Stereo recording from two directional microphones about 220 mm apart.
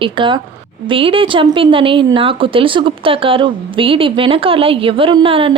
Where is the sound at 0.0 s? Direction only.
20° right (ahead or behind).